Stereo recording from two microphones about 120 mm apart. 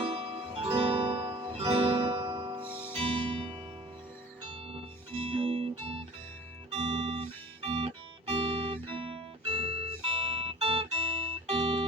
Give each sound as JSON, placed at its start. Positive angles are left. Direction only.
{"t": 0.0, "sound": "music", "side_deg": -45}
{"t": 2.6, "sound": "music", "side_deg": -15}
{"t": 2.9, "sound": "music", "side_deg": -50}
{"t": 5.2, "sound": "music", "side_deg": -50}
{"t": 6.7, "sound": "music", "side_deg": -45}